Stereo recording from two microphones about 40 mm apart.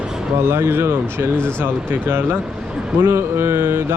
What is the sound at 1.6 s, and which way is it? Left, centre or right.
Speech, right.